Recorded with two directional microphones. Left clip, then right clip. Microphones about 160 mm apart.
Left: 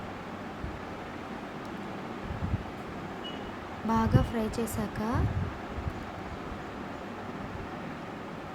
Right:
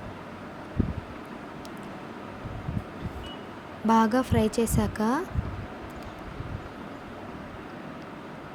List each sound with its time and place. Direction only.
3.8 s speech: 40° right (ahead or behind)